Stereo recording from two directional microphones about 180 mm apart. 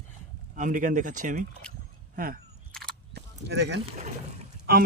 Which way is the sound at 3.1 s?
65° right (ahead or behind).